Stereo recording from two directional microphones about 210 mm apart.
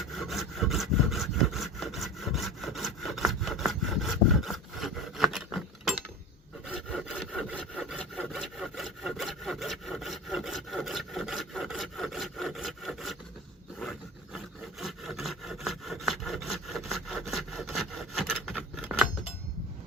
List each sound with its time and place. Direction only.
0.2 s sawing: centre (ahead or behind)
6.7 s wood: 5° right (ahead or behind)
14.3 s rub: centre (ahead or behind)